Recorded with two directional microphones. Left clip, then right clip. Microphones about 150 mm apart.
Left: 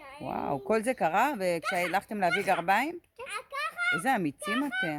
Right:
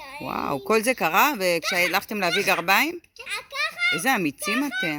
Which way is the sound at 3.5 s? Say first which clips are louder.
Right 6 dB; 15° left (ahead or behind).